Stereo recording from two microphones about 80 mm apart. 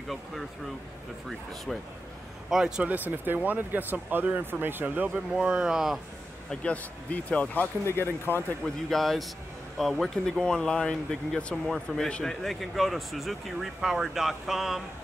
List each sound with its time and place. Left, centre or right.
1.7 s speech: centre
2.9 s speech: right; by 5.9 s centre
6.5 s speech: centre
7.8 s speech: left
8.6 s speech: centre